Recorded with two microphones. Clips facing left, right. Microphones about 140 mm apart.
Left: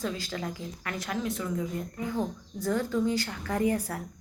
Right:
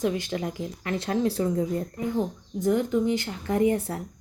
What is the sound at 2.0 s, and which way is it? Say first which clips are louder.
A woman's voice: right 4 dB; 20° right (ahead or behind).